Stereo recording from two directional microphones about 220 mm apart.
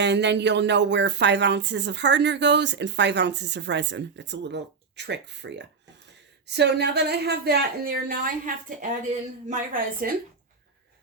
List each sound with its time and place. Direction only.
0.0 s a woman's voice: 50° right (ahead or behind)